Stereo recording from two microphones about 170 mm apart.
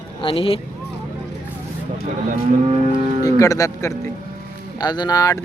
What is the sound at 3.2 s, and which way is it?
Speech, 20° left (ahead or behind).